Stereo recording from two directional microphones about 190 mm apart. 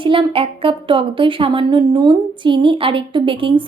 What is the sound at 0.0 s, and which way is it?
Speech, 25° right (ahead or behind).